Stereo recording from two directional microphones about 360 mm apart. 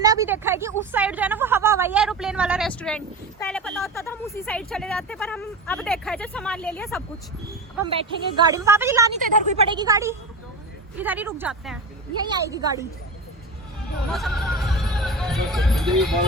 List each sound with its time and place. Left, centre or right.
0.0 s speech: centre
7.8 s a woman's voice: centre
14.1 s music: centre